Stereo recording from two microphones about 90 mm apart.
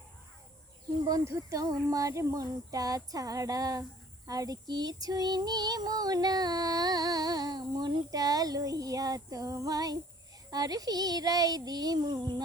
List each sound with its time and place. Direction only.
1.0 s speech: 40° right (ahead or behind)
4.3 s female singing: 40° right (ahead or behind)